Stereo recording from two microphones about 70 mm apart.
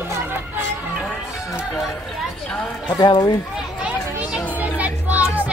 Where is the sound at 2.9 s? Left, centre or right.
Left.